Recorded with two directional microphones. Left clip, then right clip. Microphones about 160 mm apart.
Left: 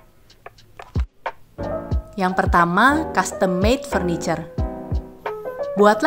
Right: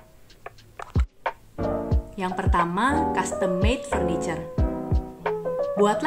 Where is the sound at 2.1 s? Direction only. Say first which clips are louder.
Left 7 dB; 40° left (ahead or behind).